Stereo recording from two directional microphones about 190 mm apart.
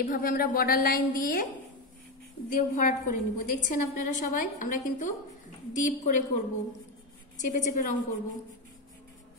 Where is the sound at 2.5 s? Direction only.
45° left (ahead or behind).